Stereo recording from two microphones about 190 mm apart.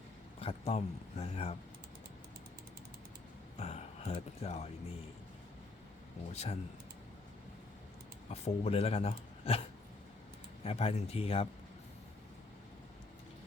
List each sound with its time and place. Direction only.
0.3 s speech: 30° left (ahead or behind)
3.6 s speech: 35° left (ahead or behind)
6.3 s speech: 35° left (ahead or behind)
8.3 s speech: 35° left (ahead or behind)